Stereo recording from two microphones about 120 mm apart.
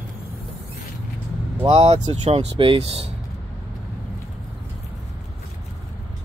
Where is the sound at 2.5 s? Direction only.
50° right (ahead or behind).